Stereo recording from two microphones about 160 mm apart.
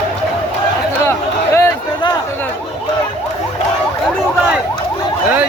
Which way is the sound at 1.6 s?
25° left (ahead or behind).